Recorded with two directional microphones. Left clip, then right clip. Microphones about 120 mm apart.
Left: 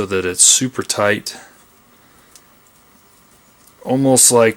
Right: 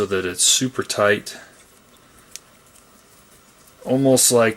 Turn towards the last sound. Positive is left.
turn(degrees=40)  # may be behind; listen again after turning